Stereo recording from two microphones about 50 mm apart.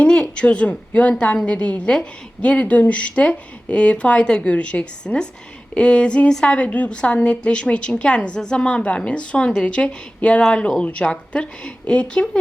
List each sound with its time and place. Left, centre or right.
0.0 s a woman's voice: left